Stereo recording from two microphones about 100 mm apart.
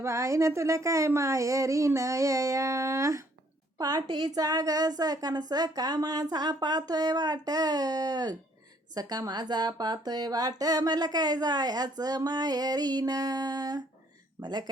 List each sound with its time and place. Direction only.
0.0 s speech: 30° right (ahead or behind); by 14.7 s 45° right (ahead or behind)